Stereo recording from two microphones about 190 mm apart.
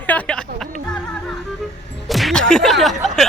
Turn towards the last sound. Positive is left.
turn(degrees=0)  # may be behind; listen again after turning